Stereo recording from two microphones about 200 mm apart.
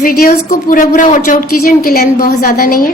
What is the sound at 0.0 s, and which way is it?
A woman's voice, 45° left (ahead or behind).